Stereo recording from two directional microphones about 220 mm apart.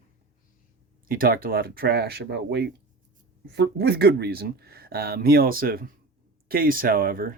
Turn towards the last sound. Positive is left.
turn(degrees=-40)  # may be behind; listen again after turning